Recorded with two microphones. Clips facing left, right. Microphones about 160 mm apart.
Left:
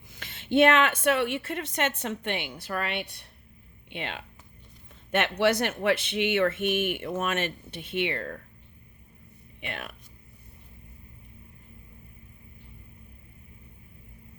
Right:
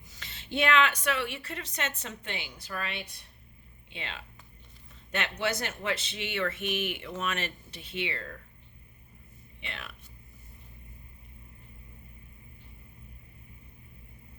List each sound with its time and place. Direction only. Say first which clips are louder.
0.1 s a woman's voice: left 10 dB; 55° left (ahead or behind)
5.4 s a woman's voice: left 9 dB; 65° left (ahead or behind)
9.6 s speech: left 6 dB; 55° left (ahead or behind)